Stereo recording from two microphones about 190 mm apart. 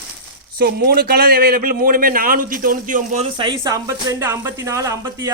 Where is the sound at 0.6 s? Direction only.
55° right (ahead or behind).